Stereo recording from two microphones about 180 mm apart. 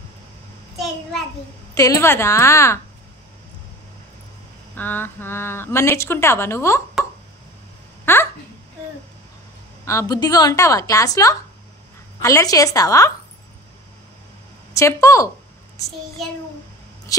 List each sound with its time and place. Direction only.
1.8 s a woman's voice: 15° left (ahead or behind)
4.7 s a woman's voice: 10° left (ahead or behind)
8.0 s a sound: 10° left (ahead or behind)
9.8 s a woman's voice: 20° left (ahead or behind)
14.7 s a woman's voice: 15° left (ahead or behind)
17.1 s speech: 20° left (ahead or behind)